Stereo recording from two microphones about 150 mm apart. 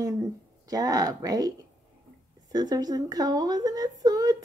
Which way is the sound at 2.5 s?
25° right (ahead or behind).